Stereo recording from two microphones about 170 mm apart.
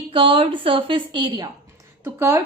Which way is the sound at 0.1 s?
30° right (ahead or behind).